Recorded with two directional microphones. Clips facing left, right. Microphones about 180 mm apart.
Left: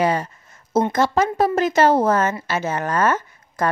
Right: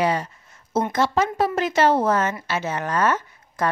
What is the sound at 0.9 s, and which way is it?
Speech, 45° left (ahead or behind).